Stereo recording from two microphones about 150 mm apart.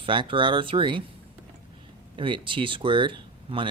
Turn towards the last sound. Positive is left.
turn(degrees=-35)  # may be behind; listen again after turning